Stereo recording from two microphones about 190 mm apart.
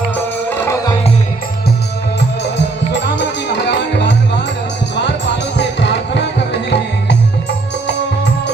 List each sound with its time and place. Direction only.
0.5 s music: 15° left (ahead or behind)
2.6 s music: 70° left (ahead or behind)